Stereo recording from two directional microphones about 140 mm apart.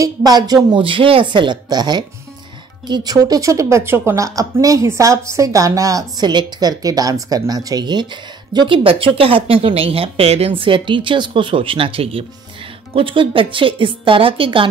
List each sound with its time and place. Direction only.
0.0 s speech: 30° right (ahead or behind)